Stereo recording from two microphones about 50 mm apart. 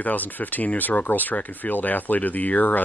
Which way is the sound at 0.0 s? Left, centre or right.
Left.